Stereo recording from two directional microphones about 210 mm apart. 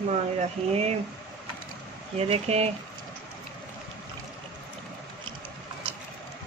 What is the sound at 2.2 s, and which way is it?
Speech, 30° right (ahead or behind).